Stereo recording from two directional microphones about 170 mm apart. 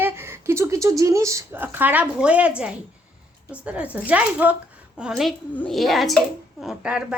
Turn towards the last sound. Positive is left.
turn(degrees=-5)  # may be behind; listen again after turning